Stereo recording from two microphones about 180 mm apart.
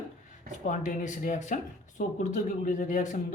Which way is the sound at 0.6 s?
45° left (ahead or behind).